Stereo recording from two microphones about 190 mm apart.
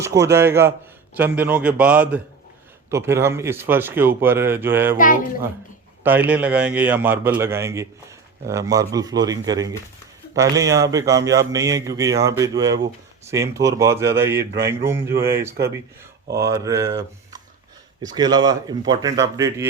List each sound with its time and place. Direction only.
0.0 s speech: 15° right (ahead or behind)
4.9 s speech: 45° left (ahead or behind)
6.0 s speech: 10° right (ahead or behind)